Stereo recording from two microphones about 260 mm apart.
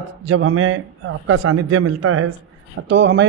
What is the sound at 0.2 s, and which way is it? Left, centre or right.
A man's voice, right.